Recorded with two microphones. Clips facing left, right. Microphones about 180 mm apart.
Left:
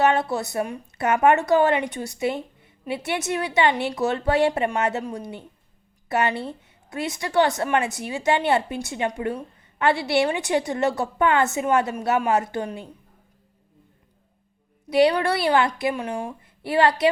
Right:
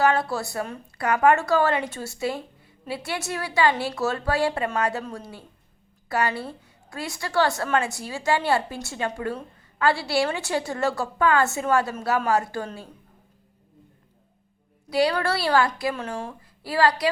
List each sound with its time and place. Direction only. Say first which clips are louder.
0.0 s a woman's voice: left 2 dB; 20° left (ahead or behind)
14.8 s a woman's voice: left 4 dB; 20° left (ahead or behind)